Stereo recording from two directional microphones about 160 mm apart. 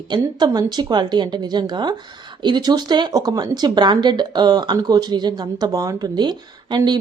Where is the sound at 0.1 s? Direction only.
25° right (ahead or behind).